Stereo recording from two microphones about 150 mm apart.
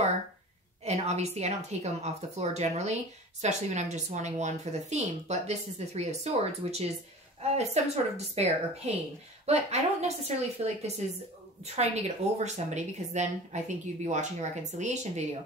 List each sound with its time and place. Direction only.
0.8 s a woman's voice: 45° right (ahead or behind)